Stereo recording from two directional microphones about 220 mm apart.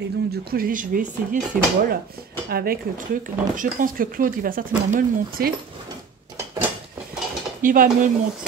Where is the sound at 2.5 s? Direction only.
45° right (ahead or behind).